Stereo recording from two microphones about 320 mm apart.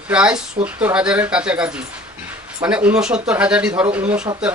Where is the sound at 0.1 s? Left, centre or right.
Centre.